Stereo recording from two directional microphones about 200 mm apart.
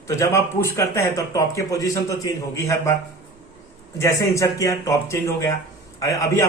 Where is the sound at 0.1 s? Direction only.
15° left (ahead or behind).